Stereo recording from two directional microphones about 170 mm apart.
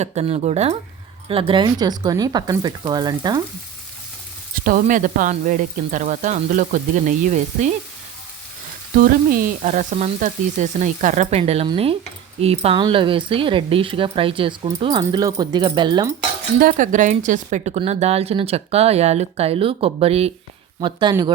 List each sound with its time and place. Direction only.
0.0 s speech: 40° right (ahead or behind); by 3.4 s 25° right (ahead or behind)
4.5 s speech: 55° right (ahead or behind)
9.0 s speech: 55° right (ahead or behind); by 16.1 s 25° right (ahead or behind)
16.6 s speech: 55° right (ahead or behind); by 20.3 s 35° right (ahead or behind)
20.8 s speech: 25° right (ahead or behind)